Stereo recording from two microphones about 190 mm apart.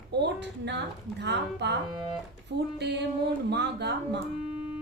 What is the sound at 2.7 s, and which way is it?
Speech, 60° right (ahead or behind).